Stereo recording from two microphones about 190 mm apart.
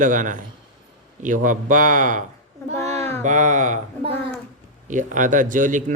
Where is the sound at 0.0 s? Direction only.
45° right (ahead or behind).